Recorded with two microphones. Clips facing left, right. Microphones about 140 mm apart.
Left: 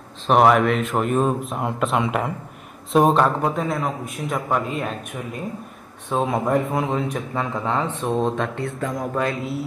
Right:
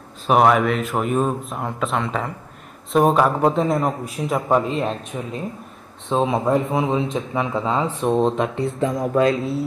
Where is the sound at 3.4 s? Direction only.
25° right (ahead or behind).